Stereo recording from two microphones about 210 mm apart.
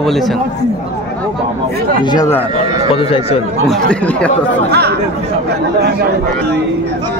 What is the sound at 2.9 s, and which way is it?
Speech, 25° left (ahead or behind).